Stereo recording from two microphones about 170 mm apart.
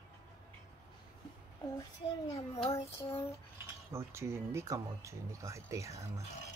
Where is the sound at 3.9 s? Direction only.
15° right (ahead or behind).